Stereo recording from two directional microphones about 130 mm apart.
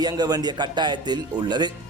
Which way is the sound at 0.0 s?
30° right (ahead or behind).